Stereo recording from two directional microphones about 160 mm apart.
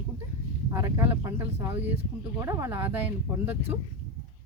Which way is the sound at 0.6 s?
20° right (ahead or behind).